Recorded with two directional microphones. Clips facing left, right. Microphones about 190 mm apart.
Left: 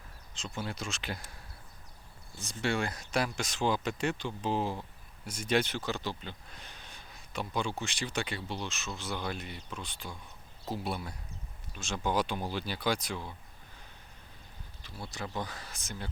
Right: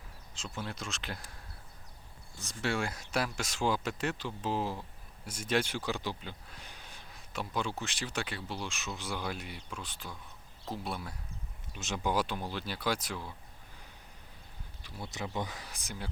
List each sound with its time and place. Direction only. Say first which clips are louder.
0.3 s speech: left 2 dB; centre (ahead or behind)
2.6 s speech: left 2 dB; 5° right (ahead or behind)
11.7 s speech: even; 20° right (ahead or behind)
12.1 s speech: left 1 dB; centre (ahead or behind)
15.1 s speech: right 1 dB; 20° right (ahead or behind)